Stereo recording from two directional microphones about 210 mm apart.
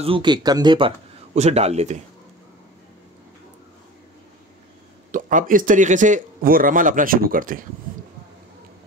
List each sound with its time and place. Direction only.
0.0 s a man's voice: 25° right (ahead or behind)
5.1 s speech: 40° right (ahead or behind)